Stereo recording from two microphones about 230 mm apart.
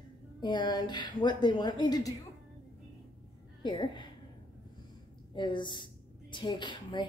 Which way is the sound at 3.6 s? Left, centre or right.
Centre.